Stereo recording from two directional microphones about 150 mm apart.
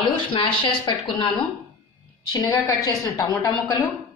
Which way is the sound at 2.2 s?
25° left (ahead or behind).